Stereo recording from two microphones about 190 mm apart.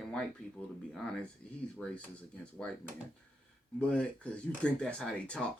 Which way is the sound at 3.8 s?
5° left (ahead or behind).